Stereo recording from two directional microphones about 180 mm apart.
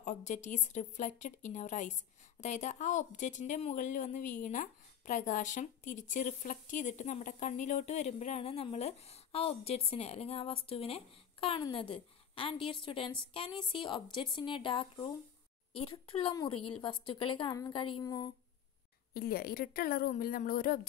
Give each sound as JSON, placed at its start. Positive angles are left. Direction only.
{"t": 0.0, "sound": "a woman's voice", "side_deg": 40}
{"t": 19.1, "sound": "a woman's voice", "side_deg": 55}